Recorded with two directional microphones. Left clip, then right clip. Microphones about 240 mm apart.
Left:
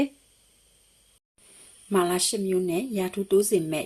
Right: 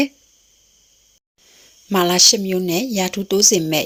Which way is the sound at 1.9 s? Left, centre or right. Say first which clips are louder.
Right 10 dB; right.